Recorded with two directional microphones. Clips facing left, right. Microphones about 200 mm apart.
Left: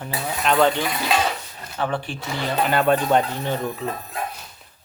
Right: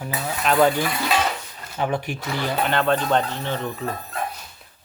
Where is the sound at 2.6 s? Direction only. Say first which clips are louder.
Left 3 dB; 10° left (ahead or behind).